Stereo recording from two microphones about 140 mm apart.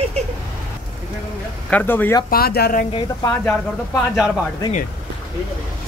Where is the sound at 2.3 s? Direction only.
90° left.